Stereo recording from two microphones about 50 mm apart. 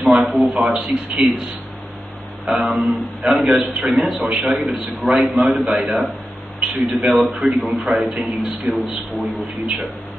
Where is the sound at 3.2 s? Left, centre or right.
Right.